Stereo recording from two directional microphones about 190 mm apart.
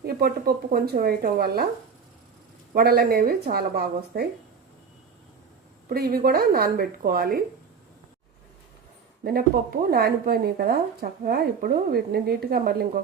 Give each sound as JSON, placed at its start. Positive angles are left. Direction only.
{"t": 0.0, "sound": "speech", "side_deg": -55}
{"t": 2.7, "sound": "speech", "side_deg": -55}
{"t": 5.9, "sound": "speech", "side_deg": -55}
{"t": 9.9, "sound": "speech", "side_deg": -55}